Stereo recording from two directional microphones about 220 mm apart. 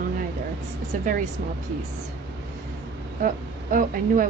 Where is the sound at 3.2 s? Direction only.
40° right (ahead or behind).